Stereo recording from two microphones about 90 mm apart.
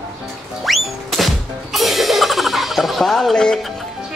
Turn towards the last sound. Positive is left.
turn(degrees=5)  # may be behind; listen again after turning